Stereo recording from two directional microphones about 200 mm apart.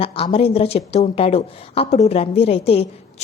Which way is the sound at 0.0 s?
30° left (ahead or behind).